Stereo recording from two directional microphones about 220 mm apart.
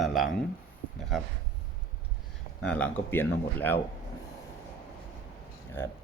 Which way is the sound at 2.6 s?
5° left (ahead or behind).